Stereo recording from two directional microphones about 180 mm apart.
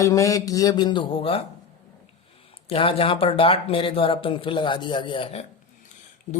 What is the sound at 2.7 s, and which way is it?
Speech, 30° left (ahead or behind).